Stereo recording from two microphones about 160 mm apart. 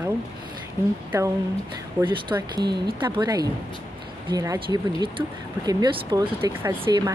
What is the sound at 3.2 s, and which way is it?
Speech, 25° right (ahead or behind).